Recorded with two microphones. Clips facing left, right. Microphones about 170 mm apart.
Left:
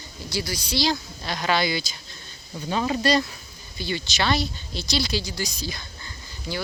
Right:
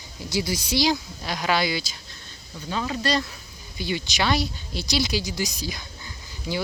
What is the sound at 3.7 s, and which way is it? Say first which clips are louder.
Speech: right 1 dB; 10° right (ahead or behind).